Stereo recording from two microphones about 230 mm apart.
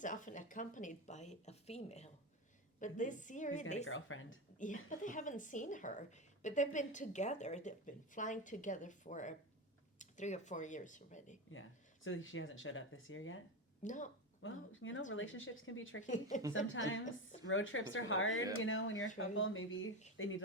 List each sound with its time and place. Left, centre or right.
0.0 s a woman's voice: left
3.8 s a woman's voice: left
4.5 s a woman's voice: left
12.0 s a woman's voice: left
13.8 s a woman's voice: left
14.4 s a woman's voice: left